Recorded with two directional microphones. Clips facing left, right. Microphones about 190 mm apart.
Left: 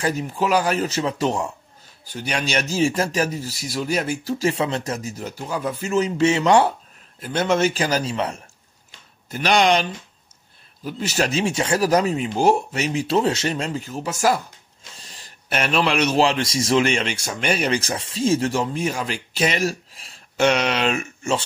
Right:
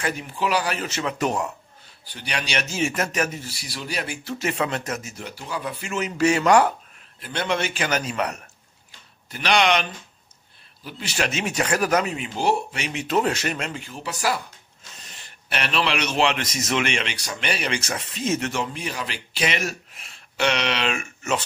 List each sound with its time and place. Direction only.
0.0 s a man's voice: 40° left (ahead or behind)
2.0 s a man's voice: 45° left (ahead or behind); by 6.7 s 25° left (ahead or behind)
7.2 s a man's voice: 45° left (ahead or behind); by 8.4 s 30° left (ahead or behind)
9.3 s a man's voice: 45° left (ahead or behind)
15.0 s a man's voice: 35° left (ahead or behind)